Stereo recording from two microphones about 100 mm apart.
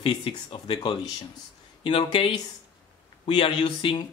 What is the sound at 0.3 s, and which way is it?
Speech, 45° left (ahead or behind).